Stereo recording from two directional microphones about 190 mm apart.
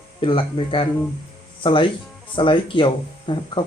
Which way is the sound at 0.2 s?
25° left (ahead or behind).